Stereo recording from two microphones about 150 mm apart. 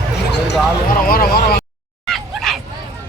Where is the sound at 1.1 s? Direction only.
85° left.